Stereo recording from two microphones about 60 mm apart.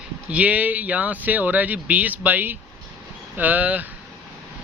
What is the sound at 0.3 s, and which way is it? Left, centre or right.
Speech, right.